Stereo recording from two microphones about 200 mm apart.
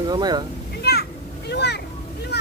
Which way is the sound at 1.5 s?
55° left (ahead or behind).